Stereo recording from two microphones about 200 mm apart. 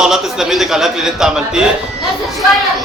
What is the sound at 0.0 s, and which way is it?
A man's voice, centre (ahead or behind).